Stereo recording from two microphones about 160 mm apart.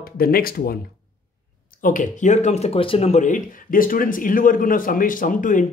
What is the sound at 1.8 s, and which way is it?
Speech, 55° left (ahead or behind).